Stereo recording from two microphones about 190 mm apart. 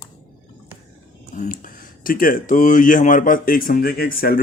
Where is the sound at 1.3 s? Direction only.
40° left (ahead or behind).